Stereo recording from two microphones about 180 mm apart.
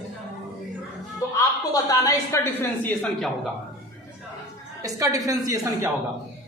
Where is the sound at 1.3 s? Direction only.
20° left (ahead or behind).